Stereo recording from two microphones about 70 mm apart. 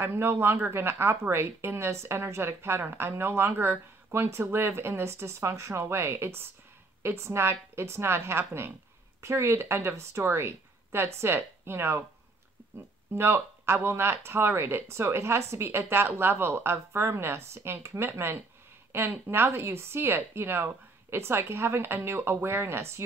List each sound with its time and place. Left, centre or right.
0.0 s speech: right
13.1 s speech: right